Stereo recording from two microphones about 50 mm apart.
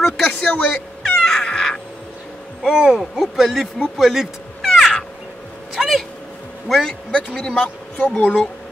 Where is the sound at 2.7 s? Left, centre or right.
Centre.